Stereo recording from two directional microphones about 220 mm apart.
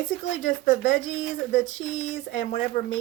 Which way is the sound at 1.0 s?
60° left (ahead or behind).